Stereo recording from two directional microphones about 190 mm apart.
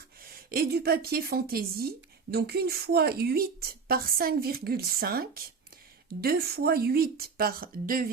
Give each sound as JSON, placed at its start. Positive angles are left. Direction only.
{"t": 0.2, "sound": "a woman's voice", "side_deg": -50}